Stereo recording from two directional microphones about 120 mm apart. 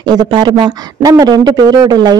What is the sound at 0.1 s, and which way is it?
Speech, 35° right (ahead or behind).